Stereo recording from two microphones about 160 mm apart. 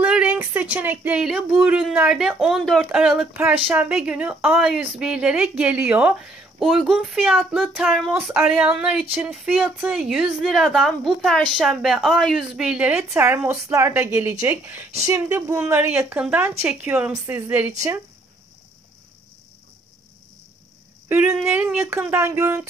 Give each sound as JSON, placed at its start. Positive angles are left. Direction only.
{"t": 0.0, "sound": "a woman's voice", "side_deg": -10}
{"t": 21.1, "sound": "speech", "side_deg": -10}